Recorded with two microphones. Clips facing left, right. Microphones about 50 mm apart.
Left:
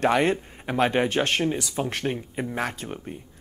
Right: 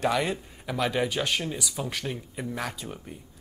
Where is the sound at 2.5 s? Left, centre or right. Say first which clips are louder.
Left 4 dB; left.